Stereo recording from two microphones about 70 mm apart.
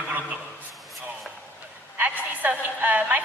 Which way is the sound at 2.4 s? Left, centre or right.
Right.